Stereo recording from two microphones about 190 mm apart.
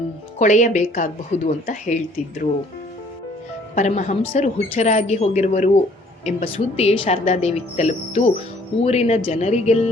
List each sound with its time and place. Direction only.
0.3 s a woman's voice: 40° left (ahead or behind)
3.8 s a woman's voice: 40° left (ahead or behind)